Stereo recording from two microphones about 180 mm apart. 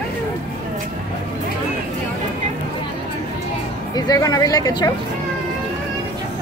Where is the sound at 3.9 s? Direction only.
20° left (ahead or behind).